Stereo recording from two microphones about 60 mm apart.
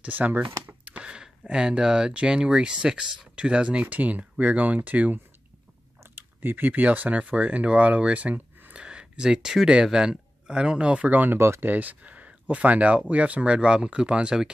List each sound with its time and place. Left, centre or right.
0.0 s speech: right
11.3 s speech: right
11.6 s speech: right; by 14.5 s centre